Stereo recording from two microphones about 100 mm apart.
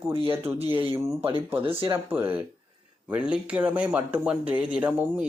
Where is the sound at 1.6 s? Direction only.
60° right (ahead or behind).